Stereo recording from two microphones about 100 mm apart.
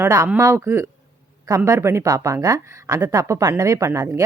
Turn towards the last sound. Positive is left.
turn(degrees=-30)  # may be behind; listen again after turning